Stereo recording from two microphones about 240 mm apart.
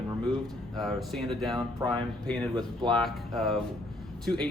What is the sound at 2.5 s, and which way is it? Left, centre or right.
Speech, centre.